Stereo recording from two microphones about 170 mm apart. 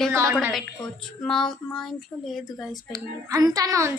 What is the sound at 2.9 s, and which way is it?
A child's voice, 20° right (ahead or behind).